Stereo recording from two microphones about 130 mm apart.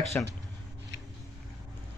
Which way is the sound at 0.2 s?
15° left (ahead or behind).